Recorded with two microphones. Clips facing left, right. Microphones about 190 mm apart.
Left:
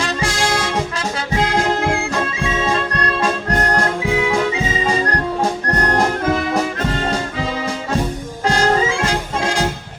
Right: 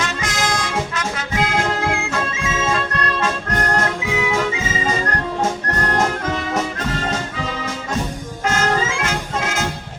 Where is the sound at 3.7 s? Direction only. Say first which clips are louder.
Left 2 dB; 35° left (ahead or behind).